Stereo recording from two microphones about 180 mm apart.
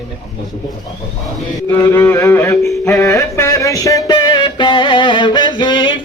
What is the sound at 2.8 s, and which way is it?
Music, 15° left (ahead or behind).